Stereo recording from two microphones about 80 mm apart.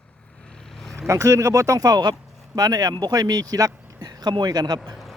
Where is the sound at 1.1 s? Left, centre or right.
Right.